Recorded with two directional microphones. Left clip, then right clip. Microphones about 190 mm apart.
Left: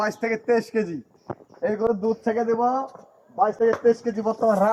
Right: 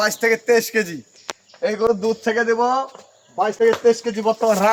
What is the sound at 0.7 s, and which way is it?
Speech, 10° left (ahead or behind).